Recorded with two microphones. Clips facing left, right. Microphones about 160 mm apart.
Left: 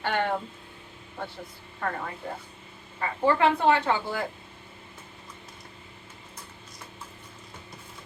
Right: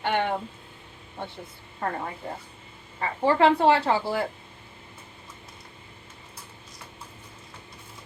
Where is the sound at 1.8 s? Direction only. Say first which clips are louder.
Right 2 dB; 25° right (ahead or behind).